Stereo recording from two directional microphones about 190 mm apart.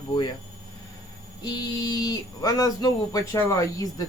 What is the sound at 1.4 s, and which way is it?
Speech, 20° left (ahead or behind).